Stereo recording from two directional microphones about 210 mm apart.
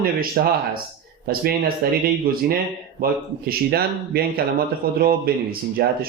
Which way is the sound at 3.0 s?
45° right (ahead or behind).